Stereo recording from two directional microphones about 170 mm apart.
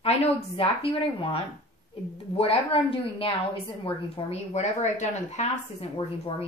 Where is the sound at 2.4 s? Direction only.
35° left (ahead or behind).